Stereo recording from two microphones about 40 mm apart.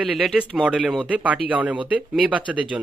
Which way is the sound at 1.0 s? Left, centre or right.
Right.